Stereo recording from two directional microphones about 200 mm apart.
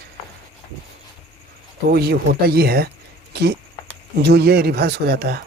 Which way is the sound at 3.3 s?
55° right (ahead or behind).